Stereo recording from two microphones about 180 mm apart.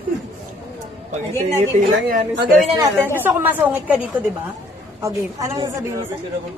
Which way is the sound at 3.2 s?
10° right (ahead or behind).